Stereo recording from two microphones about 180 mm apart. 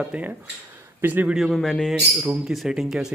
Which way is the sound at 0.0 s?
5° right (ahead or behind).